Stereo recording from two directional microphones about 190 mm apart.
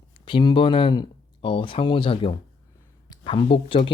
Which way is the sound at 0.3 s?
25° left (ahead or behind).